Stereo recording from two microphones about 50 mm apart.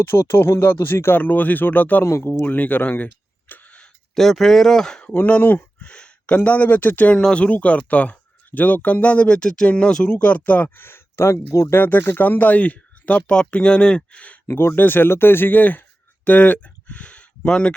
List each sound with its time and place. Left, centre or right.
0.0 s speech: left
1.2 s speech: left
2.0 s speech: left
2.4 s speech: left
3.5 s a sound: left
4.1 s speech: centre
5.0 s speech: left
5.8 s a sound: centre
6.3 s speech: left
7.1 s speech: centre
10.1 s speech: left
10.8 s speech: left
11.7 s speech: left
14.4 s speech: left